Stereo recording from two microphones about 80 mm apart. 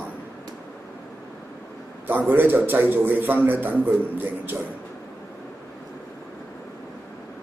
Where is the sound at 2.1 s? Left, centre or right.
Right.